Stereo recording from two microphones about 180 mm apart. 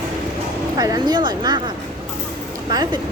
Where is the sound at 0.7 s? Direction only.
20° right (ahead or behind).